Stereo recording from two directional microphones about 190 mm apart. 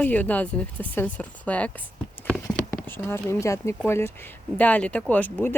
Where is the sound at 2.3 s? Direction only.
10° left (ahead or behind).